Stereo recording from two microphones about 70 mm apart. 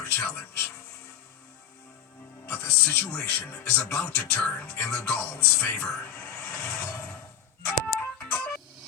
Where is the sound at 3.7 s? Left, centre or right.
Left.